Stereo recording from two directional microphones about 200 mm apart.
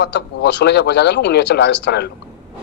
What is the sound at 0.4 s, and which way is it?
A man's voice, 60° left (ahead or behind).